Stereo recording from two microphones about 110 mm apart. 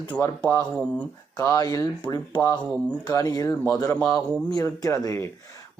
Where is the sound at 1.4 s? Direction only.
30° left (ahead or behind).